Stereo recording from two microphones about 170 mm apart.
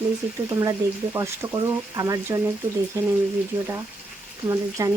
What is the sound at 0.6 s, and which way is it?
Speech, 20° right (ahead or behind).